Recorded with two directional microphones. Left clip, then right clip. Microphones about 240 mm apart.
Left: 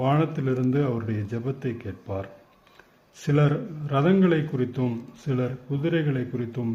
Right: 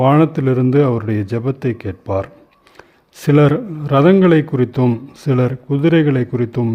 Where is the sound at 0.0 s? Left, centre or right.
Right.